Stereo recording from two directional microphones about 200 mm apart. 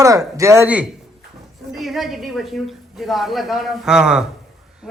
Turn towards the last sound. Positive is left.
turn(degrees=-5)  # may be behind; listen again after turning